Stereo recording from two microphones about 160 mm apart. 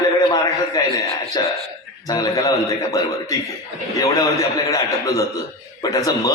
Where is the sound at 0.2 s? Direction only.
25° left (ahead or behind).